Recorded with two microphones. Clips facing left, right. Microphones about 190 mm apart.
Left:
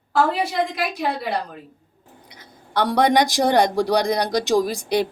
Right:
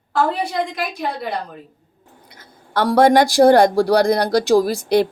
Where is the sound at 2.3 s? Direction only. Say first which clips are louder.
Right 2 dB; 20° left (ahead or behind).